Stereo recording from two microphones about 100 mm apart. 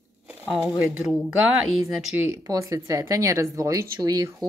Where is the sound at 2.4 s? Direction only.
30° right (ahead or behind).